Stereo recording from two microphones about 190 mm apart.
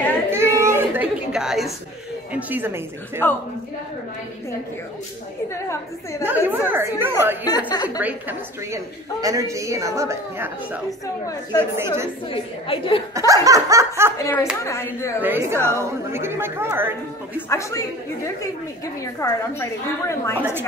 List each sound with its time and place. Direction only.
0.3 s baby cry: 15° right (ahead or behind)
2.3 s a woman's voice: 10° right (ahead or behind)
5.5 s a woman's voice: 15° left (ahead or behind)
6.2 s a woman's voice: 10° right (ahead or behind)
7.7 s a woman's voice: 20° left (ahead or behind)
8.0 s a woman's voice: 10° right (ahead or behind)
12.3 s a woman's voice: 30° left (ahead or behind)
13.1 s a woman's voice: 15° right (ahead or behind)
14.1 s a woman's voice: 15° left (ahead or behind)
15.2 s a woman's voice: 10° right (ahead or behind)
17.5 s a woman's voice: 15° left (ahead or behind)